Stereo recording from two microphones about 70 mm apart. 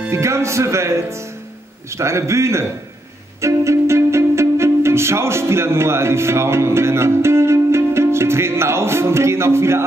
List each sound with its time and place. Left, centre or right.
0.1 s speech: right
3.3 s music: right